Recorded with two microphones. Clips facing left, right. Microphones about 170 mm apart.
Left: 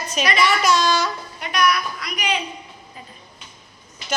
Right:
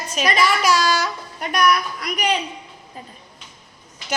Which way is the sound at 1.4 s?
45° right (ahead or behind).